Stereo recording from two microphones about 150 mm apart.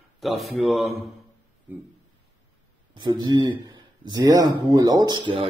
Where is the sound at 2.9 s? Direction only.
30° right (ahead or behind).